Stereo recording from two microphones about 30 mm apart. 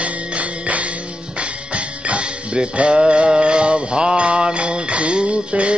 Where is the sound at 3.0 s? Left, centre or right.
Right.